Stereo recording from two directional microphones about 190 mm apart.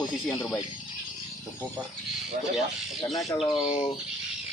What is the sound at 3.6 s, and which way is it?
Speech, 30° left (ahead or behind).